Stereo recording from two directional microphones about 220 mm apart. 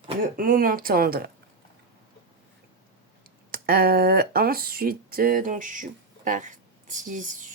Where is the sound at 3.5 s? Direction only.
45° right (ahead or behind).